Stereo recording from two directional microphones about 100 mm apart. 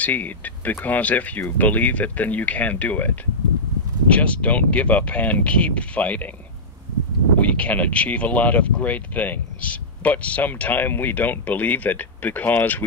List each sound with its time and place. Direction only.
0.0 s speech: 15° left (ahead or behind)
4.1 s speech: 15° left (ahead or behind)
7.3 s speech: 15° left (ahead or behind)